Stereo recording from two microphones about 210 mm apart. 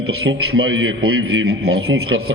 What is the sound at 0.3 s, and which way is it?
A man's voice, 70° right (ahead or behind).